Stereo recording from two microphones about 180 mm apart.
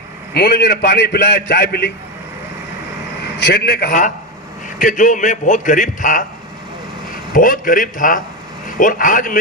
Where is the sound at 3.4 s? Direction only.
65° left (ahead or behind).